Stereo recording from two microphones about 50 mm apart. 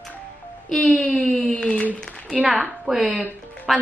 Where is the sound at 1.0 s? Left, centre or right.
Left.